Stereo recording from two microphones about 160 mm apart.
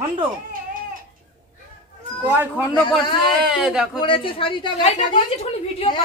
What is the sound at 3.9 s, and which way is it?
A woman's voice, 30° left (ahead or behind).